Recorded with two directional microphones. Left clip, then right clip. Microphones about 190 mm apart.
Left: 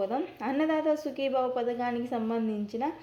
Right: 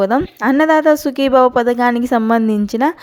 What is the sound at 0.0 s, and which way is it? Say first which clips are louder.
A woman's voice: right 16 dB; 45° right (ahead or behind).